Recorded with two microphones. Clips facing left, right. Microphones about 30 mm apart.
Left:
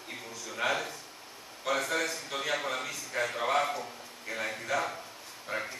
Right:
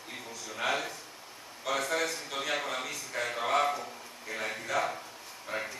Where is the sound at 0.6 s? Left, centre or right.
Centre.